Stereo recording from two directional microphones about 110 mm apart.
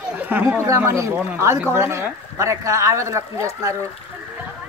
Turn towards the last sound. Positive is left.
turn(degrees=-30)  # may be behind; listen again after turning